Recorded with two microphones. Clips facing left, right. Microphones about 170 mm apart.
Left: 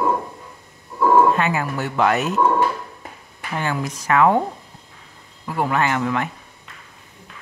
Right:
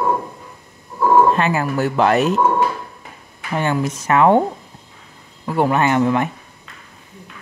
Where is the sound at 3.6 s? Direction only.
25° right (ahead or behind).